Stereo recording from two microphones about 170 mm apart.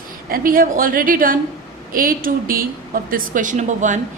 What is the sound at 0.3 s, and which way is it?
A woman's voice, 55° right (ahead or behind).